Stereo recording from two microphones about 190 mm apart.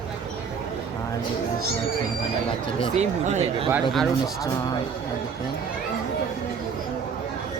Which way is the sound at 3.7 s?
5° right (ahead or behind).